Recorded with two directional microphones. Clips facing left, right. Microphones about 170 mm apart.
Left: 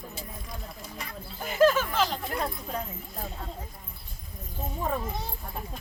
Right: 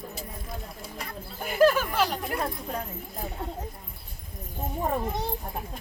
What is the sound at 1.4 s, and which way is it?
Speech, 10° right (ahead or behind).